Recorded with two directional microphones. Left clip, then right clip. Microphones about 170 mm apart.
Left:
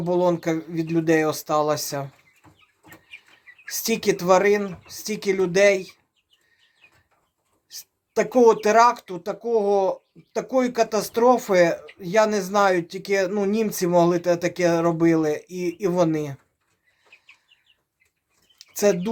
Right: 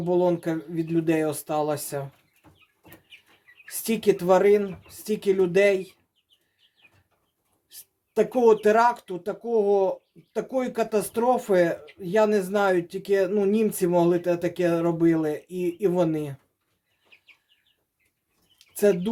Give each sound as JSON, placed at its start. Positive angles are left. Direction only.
{"t": 0.0, "sound": "speech", "side_deg": 15}
{"t": 3.7, "sound": "speech", "side_deg": 20}
{"t": 7.7, "sound": "speech", "side_deg": 20}
{"t": 18.6, "sound": "speech", "side_deg": 20}